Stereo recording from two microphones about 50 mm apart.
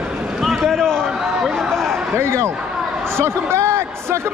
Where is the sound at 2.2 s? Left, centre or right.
Right.